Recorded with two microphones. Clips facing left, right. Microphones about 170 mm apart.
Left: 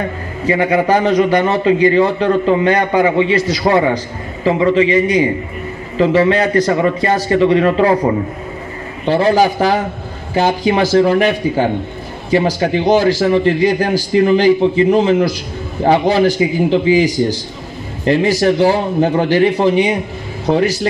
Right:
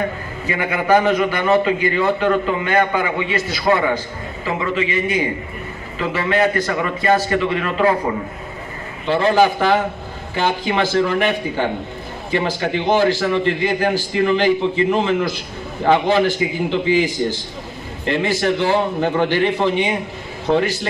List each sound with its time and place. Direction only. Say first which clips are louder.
0.5 s a man's voice: left 4 dB; 35° left (ahead or behind)
9.0 s a man's voice: left 3 dB; 40° left (ahead or behind)